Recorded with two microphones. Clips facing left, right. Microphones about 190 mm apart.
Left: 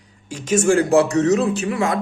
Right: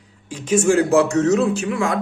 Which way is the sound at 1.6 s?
Centre (ahead or behind).